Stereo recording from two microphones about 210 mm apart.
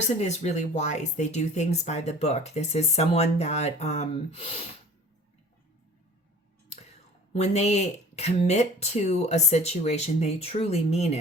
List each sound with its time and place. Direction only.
0.0 s speech: 35° left (ahead or behind)
7.3 s speech: 30° left (ahead or behind)